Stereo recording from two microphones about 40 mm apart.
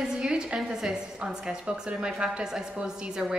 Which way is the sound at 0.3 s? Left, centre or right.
Right.